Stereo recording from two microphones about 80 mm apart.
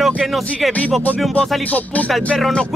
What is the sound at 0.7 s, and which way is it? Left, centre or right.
Speech, centre.